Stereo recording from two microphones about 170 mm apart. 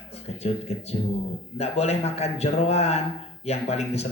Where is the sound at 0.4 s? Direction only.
40° left (ahead or behind).